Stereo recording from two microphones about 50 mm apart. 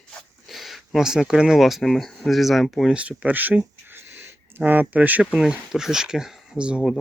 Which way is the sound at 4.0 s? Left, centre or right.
Right.